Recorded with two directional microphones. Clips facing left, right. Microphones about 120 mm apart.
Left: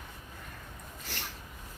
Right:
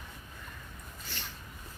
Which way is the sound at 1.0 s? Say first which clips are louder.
Left 3 dB; 70° left (ahead or behind).